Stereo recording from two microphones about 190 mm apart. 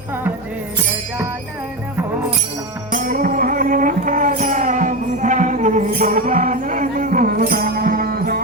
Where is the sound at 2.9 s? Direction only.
45° right (ahead or behind).